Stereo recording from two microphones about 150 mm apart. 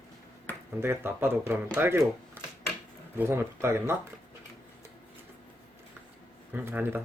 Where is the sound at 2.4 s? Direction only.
15° right (ahead or behind).